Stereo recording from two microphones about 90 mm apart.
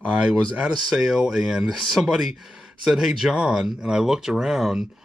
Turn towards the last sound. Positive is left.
turn(degrees=-5)  # may be behind; listen again after turning